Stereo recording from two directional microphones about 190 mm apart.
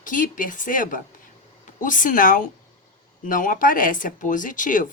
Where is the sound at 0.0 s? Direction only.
45° left (ahead or behind).